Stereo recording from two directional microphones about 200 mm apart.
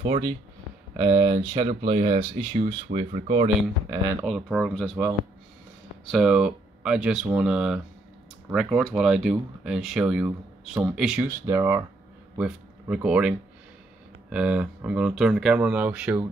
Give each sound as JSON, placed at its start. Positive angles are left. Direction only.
{"t": 0.0, "sound": "speech", "side_deg": -25}
{"t": 4.2, "sound": "speech", "side_deg": -5}
{"t": 6.1, "sound": "speech", "side_deg": -5}
{"t": 14.3, "sound": "speech", "side_deg": -5}